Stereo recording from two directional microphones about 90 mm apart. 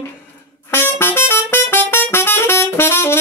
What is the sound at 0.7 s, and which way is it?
Music, 25° left (ahead or behind).